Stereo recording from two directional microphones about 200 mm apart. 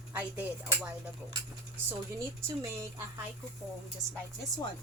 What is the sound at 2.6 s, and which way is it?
Speech, 15° right (ahead or behind).